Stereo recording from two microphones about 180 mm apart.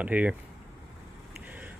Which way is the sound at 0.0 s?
10° right (ahead or behind).